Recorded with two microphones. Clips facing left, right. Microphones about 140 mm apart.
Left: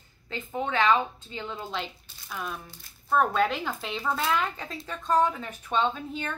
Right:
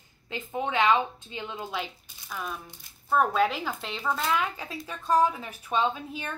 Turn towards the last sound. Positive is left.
turn(degrees=-10)  # may be behind; listen again after turning